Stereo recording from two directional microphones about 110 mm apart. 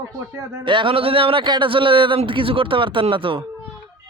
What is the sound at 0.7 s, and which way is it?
A man's voice, 50° right (ahead or behind).